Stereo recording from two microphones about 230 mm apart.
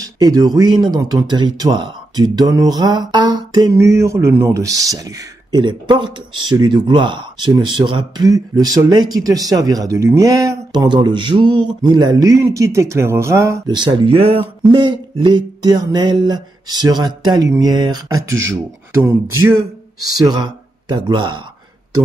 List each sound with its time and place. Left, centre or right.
0.0 s speech: centre